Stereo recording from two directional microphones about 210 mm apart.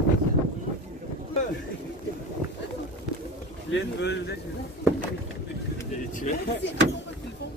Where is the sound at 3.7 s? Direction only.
55° left (ahead or behind).